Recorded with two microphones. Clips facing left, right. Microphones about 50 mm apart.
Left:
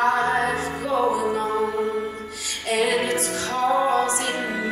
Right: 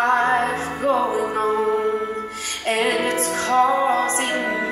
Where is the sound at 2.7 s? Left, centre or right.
Right.